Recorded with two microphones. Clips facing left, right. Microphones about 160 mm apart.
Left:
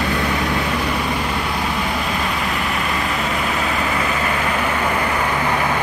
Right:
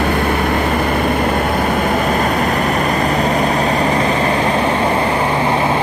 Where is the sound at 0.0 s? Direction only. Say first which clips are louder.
Right 5 dB; 55° right (ahead or behind).